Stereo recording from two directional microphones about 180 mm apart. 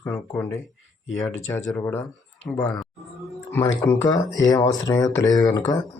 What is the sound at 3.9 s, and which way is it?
Speech, 20° left (ahead or behind).